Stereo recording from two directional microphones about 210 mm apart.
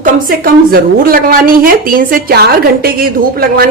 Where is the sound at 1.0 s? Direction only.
45° right (ahead or behind).